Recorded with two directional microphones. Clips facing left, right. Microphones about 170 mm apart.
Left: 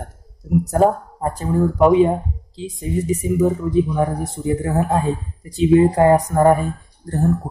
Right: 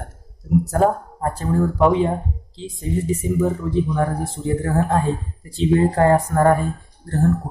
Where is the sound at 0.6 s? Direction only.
15° left (ahead or behind).